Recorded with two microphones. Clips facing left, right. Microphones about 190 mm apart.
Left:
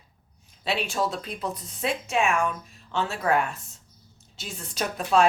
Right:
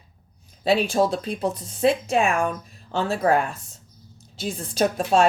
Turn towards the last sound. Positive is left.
turn(degrees=-30)  # may be behind; listen again after turning